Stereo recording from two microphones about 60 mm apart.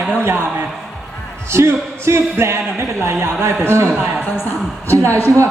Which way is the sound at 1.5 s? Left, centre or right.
Right.